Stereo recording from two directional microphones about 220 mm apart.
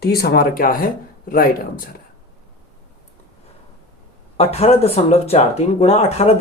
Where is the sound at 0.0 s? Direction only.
45° left (ahead or behind).